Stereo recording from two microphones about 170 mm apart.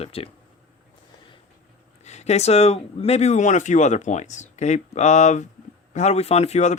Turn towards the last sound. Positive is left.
turn(degrees=40)  # may be behind; listen again after turning